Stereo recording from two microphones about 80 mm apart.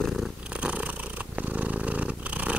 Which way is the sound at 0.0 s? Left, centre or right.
Centre.